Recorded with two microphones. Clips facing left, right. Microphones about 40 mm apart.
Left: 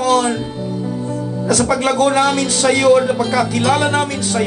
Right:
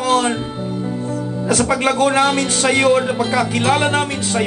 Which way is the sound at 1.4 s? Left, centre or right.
Right.